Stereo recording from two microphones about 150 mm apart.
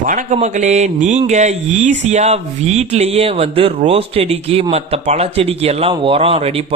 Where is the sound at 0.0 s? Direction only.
60° right (ahead or behind).